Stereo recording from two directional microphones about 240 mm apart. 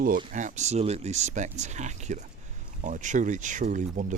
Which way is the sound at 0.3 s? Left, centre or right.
Right.